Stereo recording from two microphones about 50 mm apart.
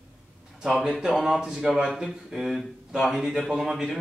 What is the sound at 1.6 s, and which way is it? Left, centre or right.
Speech, centre.